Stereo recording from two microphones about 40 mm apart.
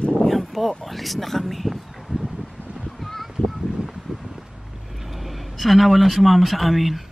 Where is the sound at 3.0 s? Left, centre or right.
Centre.